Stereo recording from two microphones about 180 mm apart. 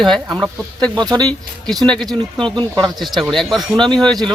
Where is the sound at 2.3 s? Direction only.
25° right (ahead or behind).